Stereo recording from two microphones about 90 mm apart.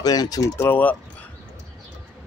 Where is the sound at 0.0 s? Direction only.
45° left (ahead or behind).